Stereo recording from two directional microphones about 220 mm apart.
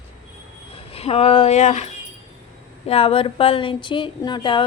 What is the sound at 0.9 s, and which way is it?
Speech, 25° left (ahead or behind).